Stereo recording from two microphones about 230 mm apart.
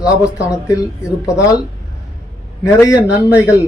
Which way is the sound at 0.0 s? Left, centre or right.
Centre.